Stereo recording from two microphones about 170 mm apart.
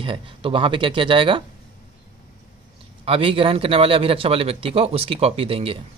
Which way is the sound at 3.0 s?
35° right (ahead or behind).